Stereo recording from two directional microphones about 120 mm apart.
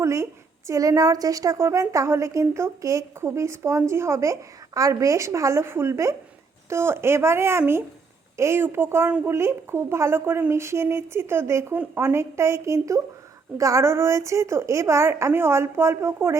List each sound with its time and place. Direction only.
0.0 s a woman's voice: 25° right (ahead or behind)